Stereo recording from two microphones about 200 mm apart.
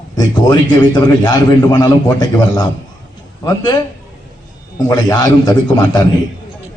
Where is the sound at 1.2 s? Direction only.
20° left (ahead or behind).